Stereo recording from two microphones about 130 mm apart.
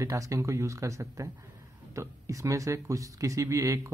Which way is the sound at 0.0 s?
25° right (ahead or behind).